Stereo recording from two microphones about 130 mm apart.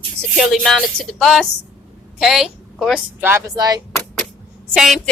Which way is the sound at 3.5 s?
30° right (ahead or behind).